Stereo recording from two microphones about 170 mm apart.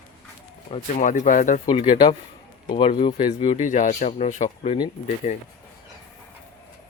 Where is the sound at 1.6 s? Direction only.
30° left (ahead or behind).